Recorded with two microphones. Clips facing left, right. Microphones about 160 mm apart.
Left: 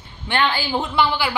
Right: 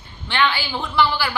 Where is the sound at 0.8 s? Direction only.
20° left (ahead or behind).